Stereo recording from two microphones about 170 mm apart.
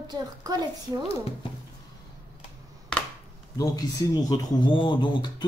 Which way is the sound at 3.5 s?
20° left (ahead or behind).